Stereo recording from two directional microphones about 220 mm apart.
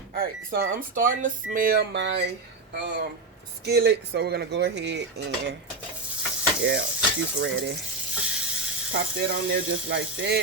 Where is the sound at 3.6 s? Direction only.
50° right (ahead or behind).